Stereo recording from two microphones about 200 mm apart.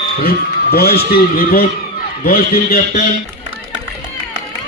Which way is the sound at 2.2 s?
45° left (ahead or behind).